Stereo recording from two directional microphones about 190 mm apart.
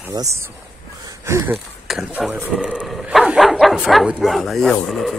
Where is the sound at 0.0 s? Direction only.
15° right (ahead or behind).